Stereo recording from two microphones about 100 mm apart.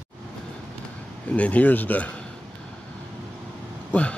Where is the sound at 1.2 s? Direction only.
15° left (ahead or behind).